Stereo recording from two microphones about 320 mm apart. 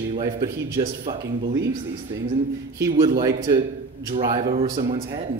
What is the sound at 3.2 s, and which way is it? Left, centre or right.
Speech, centre.